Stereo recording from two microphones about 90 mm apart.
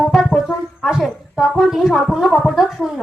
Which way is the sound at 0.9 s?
Centre (ahead or behind).